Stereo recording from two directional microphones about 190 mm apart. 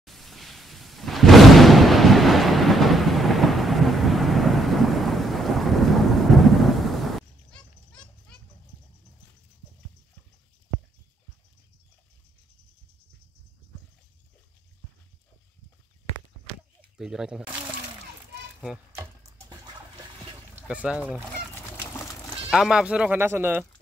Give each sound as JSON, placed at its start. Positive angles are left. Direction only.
{"t": 0.0, "sound": "a sound", "side_deg": 0}
{"t": 16.9, "sound": "speech", "side_deg": -5}
{"t": 19.5, "sound": "a sound", "side_deg": -20}
{"t": 20.6, "sound": "speech", "side_deg": -5}
{"t": 21.5, "sound": "goat", "side_deg": 10}
{"t": 22.5, "sound": "speech", "side_deg": -5}